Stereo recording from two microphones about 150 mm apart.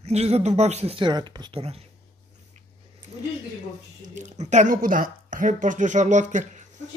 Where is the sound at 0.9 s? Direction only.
30° right (ahead or behind).